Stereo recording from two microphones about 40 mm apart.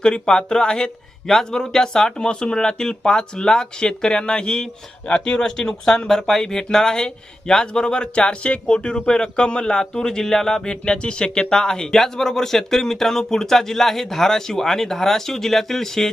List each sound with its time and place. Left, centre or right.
0.0 s speech: centre